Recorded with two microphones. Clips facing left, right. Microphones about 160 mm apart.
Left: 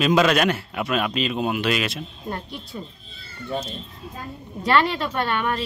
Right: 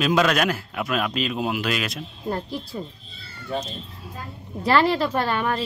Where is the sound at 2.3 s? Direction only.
35° right (ahead or behind).